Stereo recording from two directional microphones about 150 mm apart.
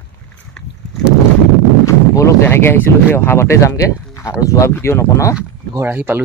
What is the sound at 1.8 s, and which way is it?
Speech, 20° left (ahead or behind).